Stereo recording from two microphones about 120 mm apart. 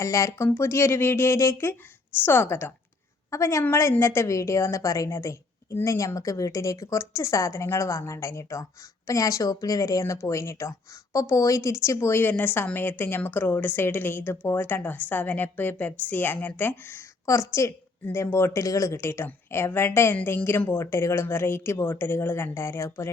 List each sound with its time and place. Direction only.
0.0 s speech: 25° left (ahead or behind)